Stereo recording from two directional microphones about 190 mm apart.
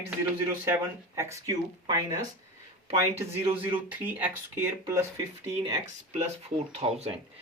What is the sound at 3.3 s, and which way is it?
Speech, 30° right (ahead or behind).